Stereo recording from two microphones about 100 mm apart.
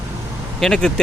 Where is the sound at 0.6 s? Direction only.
5° left (ahead or behind).